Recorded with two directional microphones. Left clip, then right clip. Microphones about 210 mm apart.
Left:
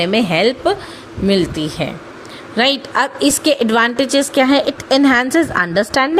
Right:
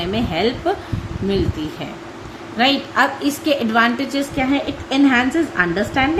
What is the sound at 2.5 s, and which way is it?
A woman's voice, 50° left (ahead or behind).